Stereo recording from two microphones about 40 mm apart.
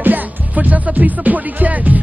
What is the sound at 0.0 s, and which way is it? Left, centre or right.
Music, right.